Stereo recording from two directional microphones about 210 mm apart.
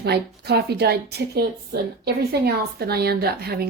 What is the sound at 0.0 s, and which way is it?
A woman's voice, 50° right (ahead or behind).